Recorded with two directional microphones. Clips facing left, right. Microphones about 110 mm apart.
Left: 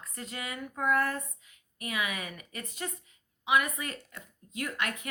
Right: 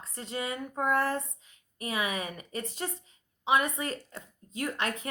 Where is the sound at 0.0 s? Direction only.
30° right (ahead or behind).